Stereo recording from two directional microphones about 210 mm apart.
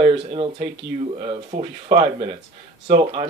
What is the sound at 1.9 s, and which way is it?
Speech, 25° right (ahead or behind).